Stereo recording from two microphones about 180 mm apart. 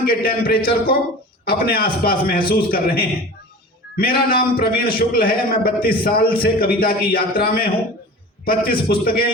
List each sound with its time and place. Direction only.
0.0 s a man's voice: 55° left (ahead or behind)